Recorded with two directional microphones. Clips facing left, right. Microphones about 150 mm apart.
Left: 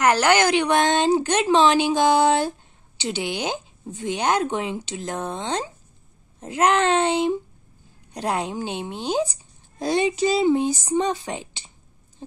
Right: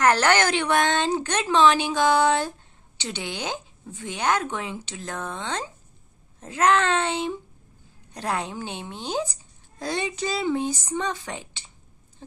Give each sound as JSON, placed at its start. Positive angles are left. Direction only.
{"t": 0.0, "sound": "speech", "side_deg": 15}